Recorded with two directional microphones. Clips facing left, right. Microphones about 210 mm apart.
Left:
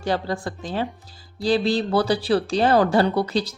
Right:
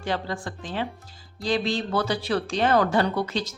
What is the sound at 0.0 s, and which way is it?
Speech, 40° left (ahead or behind).